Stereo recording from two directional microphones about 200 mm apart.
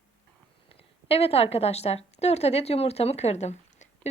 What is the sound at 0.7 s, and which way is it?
A woman's voice, 30° left (ahead or behind).